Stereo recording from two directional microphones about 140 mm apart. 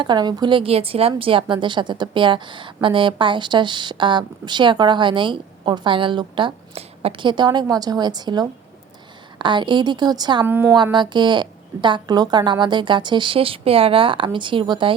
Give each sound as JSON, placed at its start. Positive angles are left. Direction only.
{"t": 0.0, "sound": "a woman's voice", "side_deg": -30}
{"t": 10.4, "sound": "speech", "side_deg": -15}
{"t": 10.9, "sound": "a woman's voice", "side_deg": -30}